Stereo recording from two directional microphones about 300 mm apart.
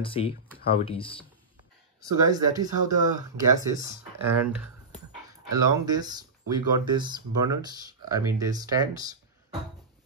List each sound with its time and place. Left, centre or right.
0.0 s speech: centre
2.0 s speech: centre